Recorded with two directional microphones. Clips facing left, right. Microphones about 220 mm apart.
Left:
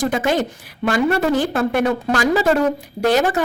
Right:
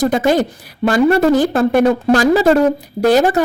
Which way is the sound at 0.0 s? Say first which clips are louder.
Right 5 dB; 40° right (ahead or behind).